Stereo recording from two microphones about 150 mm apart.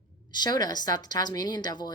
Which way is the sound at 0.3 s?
30° left (ahead or behind).